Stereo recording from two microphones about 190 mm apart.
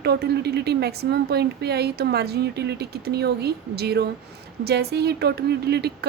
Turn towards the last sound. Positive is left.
turn(degrees=-60)  # may be behind; listen again after turning